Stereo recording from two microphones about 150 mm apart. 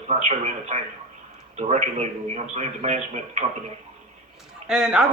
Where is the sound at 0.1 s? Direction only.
50° right (ahead or behind).